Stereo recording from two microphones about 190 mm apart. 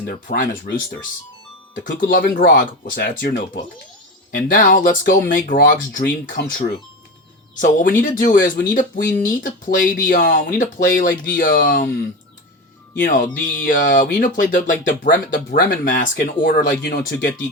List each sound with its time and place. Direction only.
0.0 s speech: 45° left (ahead or behind)
1.7 s speech: 45° left (ahead or behind)
4.4 s speech: 45° left (ahead or behind)
13.1 s speech: 45° left (ahead or behind)